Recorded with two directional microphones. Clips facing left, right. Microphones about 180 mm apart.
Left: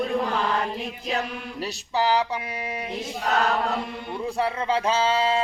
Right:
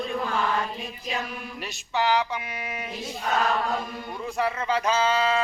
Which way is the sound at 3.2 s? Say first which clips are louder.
Left 2 dB; 70° left (ahead or behind).